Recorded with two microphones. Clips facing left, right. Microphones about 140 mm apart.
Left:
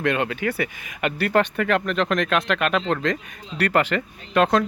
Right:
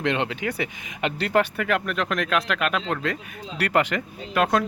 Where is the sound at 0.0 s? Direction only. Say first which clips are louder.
Left 2 dB; 20° right (ahead or behind).